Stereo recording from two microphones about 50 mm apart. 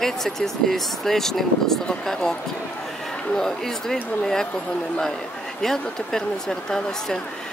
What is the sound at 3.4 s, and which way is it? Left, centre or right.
Speech, centre.